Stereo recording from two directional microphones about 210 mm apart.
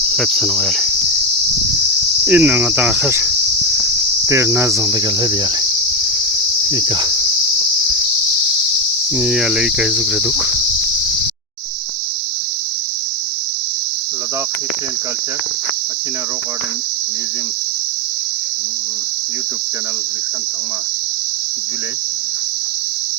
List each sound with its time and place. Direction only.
0.1 s cricket: centre (ahead or behind)
2.2 s cricket: 5° right (ahead or behind)
6.7 s cricket: 20° right (ahead or behind)
9.1 s cricket: 5° right (ahead or behind)